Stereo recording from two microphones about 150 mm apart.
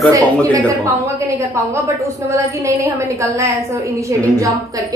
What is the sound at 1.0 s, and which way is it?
A woman's voice, 20° right (ahead or behind).